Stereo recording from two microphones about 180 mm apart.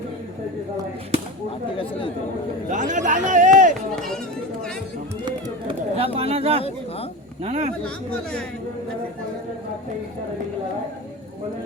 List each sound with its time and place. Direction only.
2.6 s speech: 45° right (ahead or behind)
5.2 s run: 30° right (ahead or behind)
6.1 s speech: 35° right (ahead or behind)